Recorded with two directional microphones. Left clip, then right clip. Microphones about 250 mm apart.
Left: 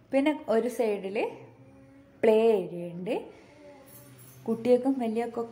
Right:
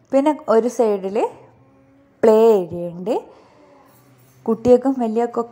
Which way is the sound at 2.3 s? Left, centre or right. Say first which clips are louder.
Right 10 dB; right.